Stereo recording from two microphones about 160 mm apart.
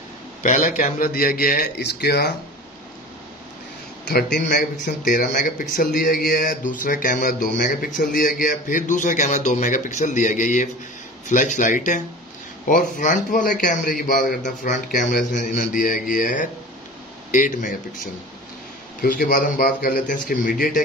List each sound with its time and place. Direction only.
0.4 s a man's voice: 55° left (ahead or behind); by 2.3 s 90° left
4.0 s a man's voice: 80° left; by 17.7 s 55° left (ahead or behind)
18.9 s speech: 60° left (ahead or behind)